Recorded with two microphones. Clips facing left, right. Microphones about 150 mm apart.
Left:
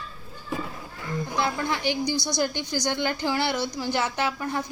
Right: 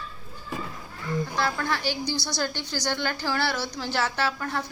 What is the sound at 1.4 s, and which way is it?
A woman's voice, 15° left (ahead or behind).